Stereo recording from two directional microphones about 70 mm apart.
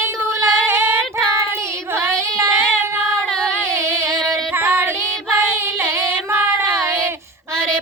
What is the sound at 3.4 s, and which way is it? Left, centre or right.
Female singing, right.